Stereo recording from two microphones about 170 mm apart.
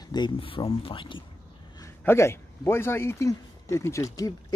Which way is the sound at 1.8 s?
15° left (ahead or behind).